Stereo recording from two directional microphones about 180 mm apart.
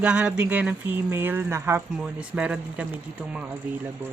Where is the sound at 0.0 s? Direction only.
5° right (ahead or behind).